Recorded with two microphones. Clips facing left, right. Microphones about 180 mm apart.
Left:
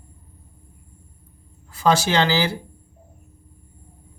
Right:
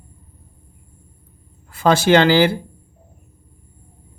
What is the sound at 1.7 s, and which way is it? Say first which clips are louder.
Speech: right 5 dB; 55° right (ahead or behind).